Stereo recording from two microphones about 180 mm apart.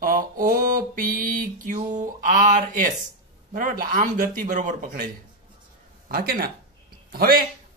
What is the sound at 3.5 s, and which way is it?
Speech, 50° right (ahead or behind).